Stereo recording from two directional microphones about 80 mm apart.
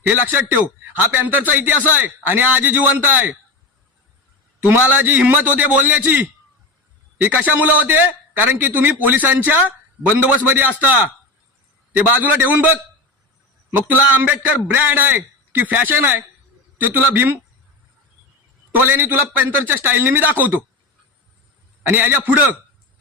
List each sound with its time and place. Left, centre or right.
0.0 s a man's voice: right
4.6 s a man's voice: right
11.9 s a man's voice: right
18.7 s a man's voice: right
21.8 s a man's voice: right